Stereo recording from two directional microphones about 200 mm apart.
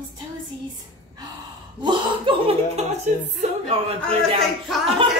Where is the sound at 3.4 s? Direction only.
30° right (ahead or behind).